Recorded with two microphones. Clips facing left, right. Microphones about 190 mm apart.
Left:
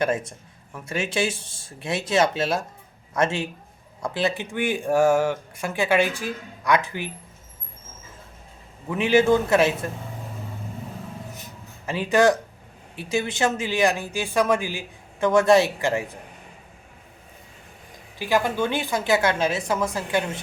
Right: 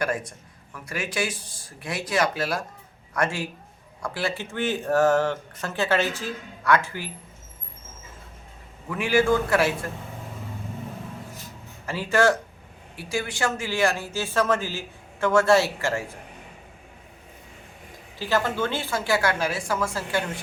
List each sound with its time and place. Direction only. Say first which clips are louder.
0.0 s speech: left 3 dB; 25° left (ahead or behind)
8.9 s speech: left 3 dB; 20° left (ahead or behind)
11.9 s speech: left 2 dB; 20° left (ahead or behind)
18.2 s speech: left 2 dB; 15° left (ahead or behind)